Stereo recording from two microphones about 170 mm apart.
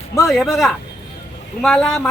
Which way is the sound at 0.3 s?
Centre (ahead or behind).